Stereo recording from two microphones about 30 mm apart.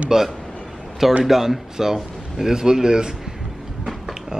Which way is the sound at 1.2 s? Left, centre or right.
Centre.